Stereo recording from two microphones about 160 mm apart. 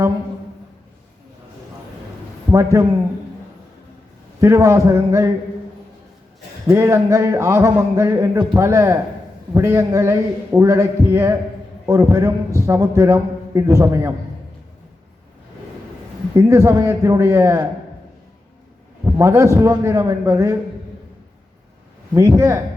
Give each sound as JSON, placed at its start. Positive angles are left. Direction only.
{"t": 4.4, "sound": "a man's voice", "side_deg": -20}
{"t": 6.7, "sound": "a man's voice", "side_deg": -20}
{"t": 16.3, "sound": "a man's voice", "side_deg": -20}
{"t": 19.0, "sound": "a man's voice", "side_deg": -20}
{"t": 22.1, "sound": "a man's voice", "side_deg": -20}